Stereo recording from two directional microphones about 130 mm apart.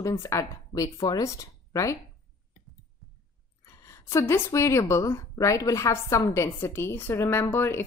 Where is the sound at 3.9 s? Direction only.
20° left (ahead or behind).